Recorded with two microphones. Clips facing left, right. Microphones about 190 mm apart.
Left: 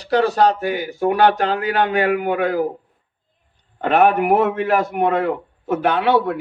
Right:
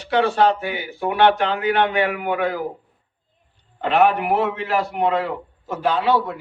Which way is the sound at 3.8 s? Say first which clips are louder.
Left 2 dB; 50° left (ahead or behind).